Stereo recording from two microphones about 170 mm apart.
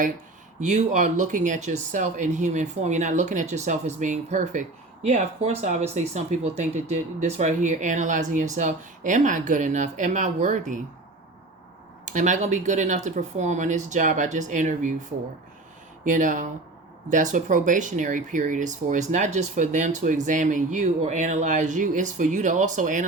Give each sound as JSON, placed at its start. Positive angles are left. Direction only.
{"t": 0.6, "sound": "speech", "side_deg": -45}
{"t": 12.0, "sound": "speech", "side_deg": -45}
{"t": 16.0, "sound": "speech", "side_deg": -50}